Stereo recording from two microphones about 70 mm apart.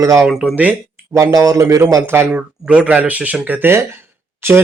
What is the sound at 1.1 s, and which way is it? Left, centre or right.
Speech, right.